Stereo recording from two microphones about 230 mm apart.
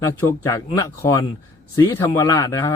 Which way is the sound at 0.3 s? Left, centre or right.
Centre.